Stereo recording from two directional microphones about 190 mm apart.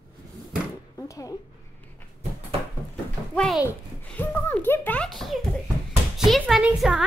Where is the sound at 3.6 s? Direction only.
10° left (ahead or behind).